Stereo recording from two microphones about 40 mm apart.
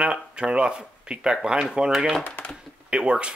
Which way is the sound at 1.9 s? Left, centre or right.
Centre.